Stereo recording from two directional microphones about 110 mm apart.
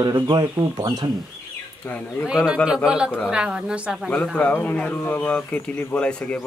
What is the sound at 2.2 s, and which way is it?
Speech, 5° right (ahead or behind).